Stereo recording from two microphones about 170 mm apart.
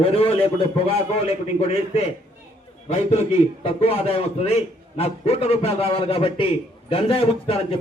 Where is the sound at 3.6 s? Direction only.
35° left (ahead or behind).